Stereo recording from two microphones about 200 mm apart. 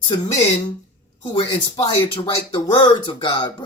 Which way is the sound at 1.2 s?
25° left (ahead or behind).